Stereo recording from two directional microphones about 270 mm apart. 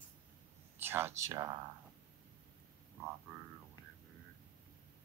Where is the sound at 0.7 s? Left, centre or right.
Centre.